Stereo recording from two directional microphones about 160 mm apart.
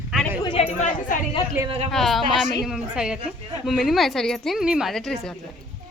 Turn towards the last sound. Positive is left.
turn(degrees=0)  # may be behind; listen again after turning